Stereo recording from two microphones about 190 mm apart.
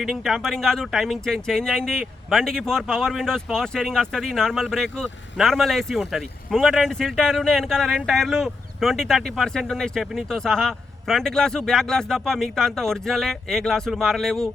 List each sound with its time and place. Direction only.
0.0 s speech: centre (ahead or behind)